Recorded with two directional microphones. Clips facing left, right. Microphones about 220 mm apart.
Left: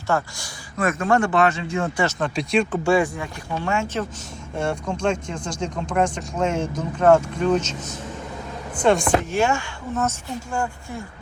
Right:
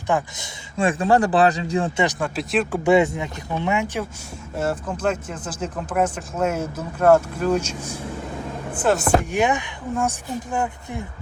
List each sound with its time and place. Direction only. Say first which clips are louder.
0.1 s speech: right 1 dB; 20° right (ahead or behind)
2.1 s speech: left 1 dB; 5° right (ahead or behind)
2.8 s speech: right 3 dB; 20° right (ahead or behind)
4.5 s speech: even; 5° right (ahead or behind); by 11.0 s 20° right (ahead or behind)